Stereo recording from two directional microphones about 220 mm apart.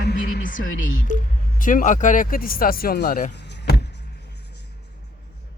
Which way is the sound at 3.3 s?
50° left (ahead or behind).